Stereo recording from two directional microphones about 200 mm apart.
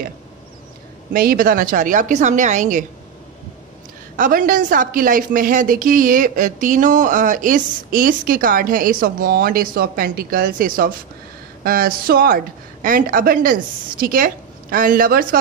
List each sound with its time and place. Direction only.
1.1 s a woman's voice: 45° right (ahead or behind)
4.2 s a woman's voice: 40° right (ahead or behind)